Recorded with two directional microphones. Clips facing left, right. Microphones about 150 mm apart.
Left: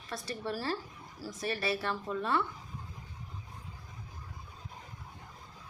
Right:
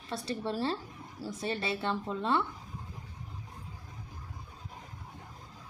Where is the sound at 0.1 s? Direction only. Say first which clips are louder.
Right 3 dB; 30° right (ahead or behind).